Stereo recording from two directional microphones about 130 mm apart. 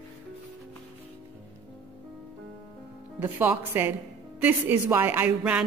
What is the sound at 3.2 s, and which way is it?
A woman's voice, 15° right (ahead or behind).